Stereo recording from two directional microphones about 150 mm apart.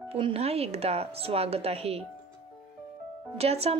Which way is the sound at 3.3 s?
40° right (ahead or behind).